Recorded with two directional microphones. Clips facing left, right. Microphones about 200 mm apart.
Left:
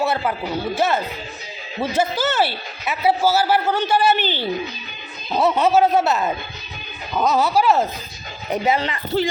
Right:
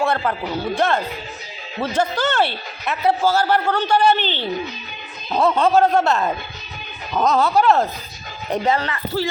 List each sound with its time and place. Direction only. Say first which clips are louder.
0.0 s a man's voice: right 1 dB; 5° left (ahead or behind)
8.8 s speech: left 2 dB; 20° left (ahead or behind)